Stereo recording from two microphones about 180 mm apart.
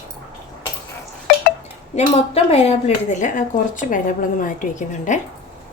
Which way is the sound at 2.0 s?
35° left (ahead or behind).